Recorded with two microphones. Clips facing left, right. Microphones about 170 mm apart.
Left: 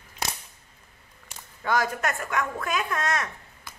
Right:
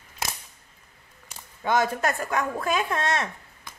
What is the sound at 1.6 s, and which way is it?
Speech, 25° right (ahead or behind).